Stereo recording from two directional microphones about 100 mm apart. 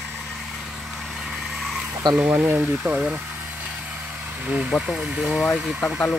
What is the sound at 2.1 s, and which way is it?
Speech, 25° right (ahead or behind).